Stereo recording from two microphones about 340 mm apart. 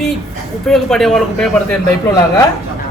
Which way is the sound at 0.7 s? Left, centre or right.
Centre.